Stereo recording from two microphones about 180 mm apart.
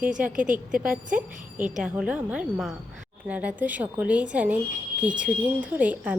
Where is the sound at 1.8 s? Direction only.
5° right (ahead or behind).